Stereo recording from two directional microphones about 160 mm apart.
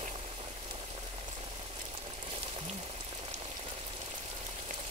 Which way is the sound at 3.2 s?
40° right (ahead or behind).